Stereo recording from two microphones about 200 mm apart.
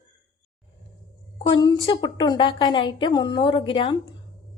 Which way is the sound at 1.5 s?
20° left (ahead or behind).